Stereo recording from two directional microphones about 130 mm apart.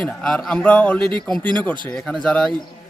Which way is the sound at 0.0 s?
5° left (ahead or behind).